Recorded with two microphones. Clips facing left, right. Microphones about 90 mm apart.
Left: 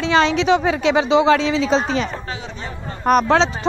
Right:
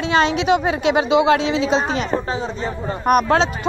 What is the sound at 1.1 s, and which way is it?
Speech, 30° left (ahead or behind).